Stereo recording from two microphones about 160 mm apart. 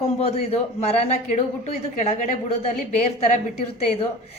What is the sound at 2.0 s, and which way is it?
Speech, 45° left (ahead or behind).